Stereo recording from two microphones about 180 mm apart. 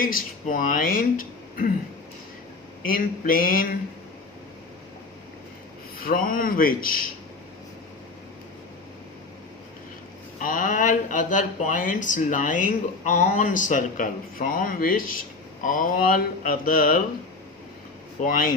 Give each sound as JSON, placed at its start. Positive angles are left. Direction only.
{"t": 0.0, "sound": "speech", "side_deg": 50}
{"t": 2.8, "sound": "speech", "side_deg": 50}
{"t": 6.0, "sound": "speech", "side_deg": 50}
{"t": 10.4, "sound": "speech", "side_deg": 50}
{"t": 18.2, "sound": "speech", "side_deg": 50}